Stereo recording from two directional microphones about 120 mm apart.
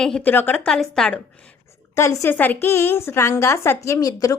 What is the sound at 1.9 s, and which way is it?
A woman's voice, 20° left (ahead or behind).